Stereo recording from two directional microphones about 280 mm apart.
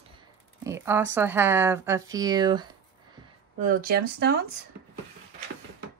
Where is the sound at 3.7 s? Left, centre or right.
Right.